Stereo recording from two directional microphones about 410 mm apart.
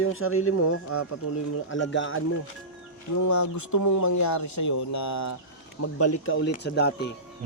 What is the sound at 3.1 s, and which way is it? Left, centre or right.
Speech, left.